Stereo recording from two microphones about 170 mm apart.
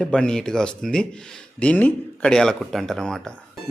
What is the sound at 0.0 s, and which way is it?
Speech, 5° left (ahead or behind).